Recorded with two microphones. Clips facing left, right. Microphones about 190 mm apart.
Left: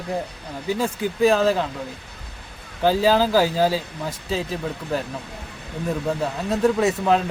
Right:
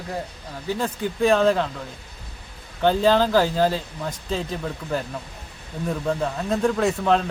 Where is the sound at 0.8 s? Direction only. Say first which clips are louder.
Left 3 dB; 5° left (ahead or behind).